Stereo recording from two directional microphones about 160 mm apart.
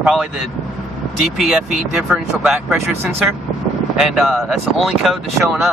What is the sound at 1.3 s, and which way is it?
Speech, 5° right (ahead or behind).